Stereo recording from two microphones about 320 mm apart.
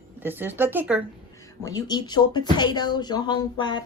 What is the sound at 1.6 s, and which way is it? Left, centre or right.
Speech, centre.